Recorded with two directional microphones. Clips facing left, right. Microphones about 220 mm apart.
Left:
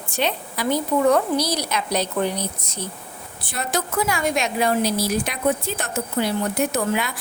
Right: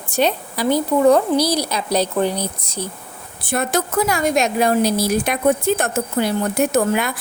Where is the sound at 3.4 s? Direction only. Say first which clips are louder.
Right 6 dB; 50° right (ahead or behind).